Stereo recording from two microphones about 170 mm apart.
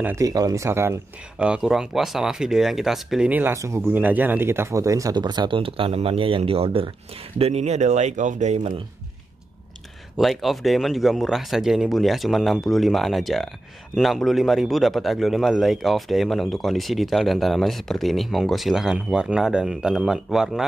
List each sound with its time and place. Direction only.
0.0 s speech: 20° right (ahead or behind)
1.4 s speech: 5° right (ahead or behind); by 8.7 s 45° right (ahead or behind)
10.1 s speech: centre (ahead or behind)